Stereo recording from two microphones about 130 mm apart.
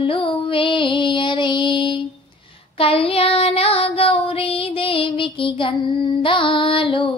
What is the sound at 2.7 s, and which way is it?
Child singing, 45° left (ahead or behind).